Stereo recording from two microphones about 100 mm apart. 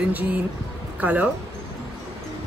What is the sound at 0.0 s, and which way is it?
Speech, 15° right (ahead or behind).